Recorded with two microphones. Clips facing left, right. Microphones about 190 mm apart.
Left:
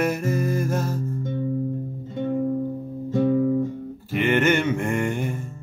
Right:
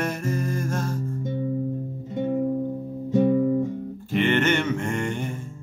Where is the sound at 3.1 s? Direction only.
15° right (ahead or behind).